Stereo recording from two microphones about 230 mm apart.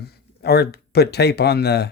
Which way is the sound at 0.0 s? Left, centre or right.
Left.